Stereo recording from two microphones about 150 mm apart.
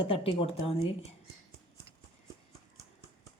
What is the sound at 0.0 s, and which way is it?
Speech, 40° left (ahead or behind).